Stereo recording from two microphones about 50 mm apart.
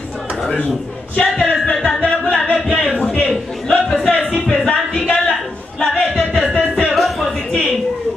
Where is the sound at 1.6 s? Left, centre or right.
Centre.